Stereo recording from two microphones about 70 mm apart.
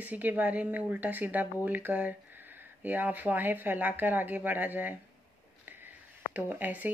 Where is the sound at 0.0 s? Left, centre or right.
Right.